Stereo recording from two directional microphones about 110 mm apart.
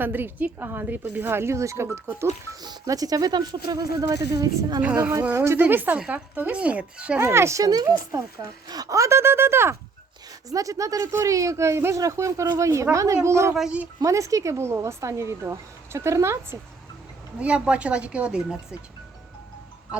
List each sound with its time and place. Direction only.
0.0 s speech: 20° right (ahead or behind)
2.6 s speech: 35° right (ahead or behind)
5.3 s speech: 20° right (ahead or behind)
7.2 s speech: 25° right (ahead or behind)
13.6 s speech: 10° right (ahead or behind)
14.0 s speech: 30° right (ahead or behind)
17.4 s speech: 10° right (ahead or behind)